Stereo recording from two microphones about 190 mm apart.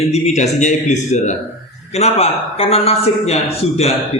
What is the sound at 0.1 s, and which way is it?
A man's voice, 35° left (ahead or behind).